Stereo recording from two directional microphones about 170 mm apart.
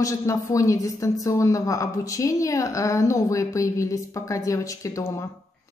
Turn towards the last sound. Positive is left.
turn(degrees=20)  # may be behind; listen again after turning